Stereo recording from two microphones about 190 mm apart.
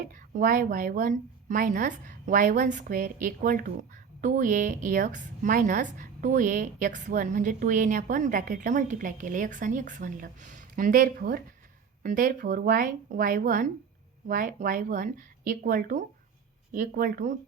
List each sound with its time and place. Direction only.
0.1 s a woman's voice: 45° right (ahead or behind)